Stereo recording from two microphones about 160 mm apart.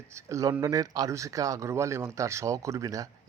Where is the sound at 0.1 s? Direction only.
20° right (ahead or behind).